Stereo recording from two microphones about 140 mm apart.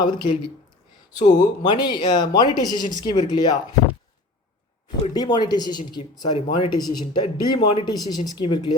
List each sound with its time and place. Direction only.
0.0 s speech: 35° left (ahead or behind)
1.4 s speech: 30° left (ahead or behind)
5.1 s speech: 30° left (ahead or behind)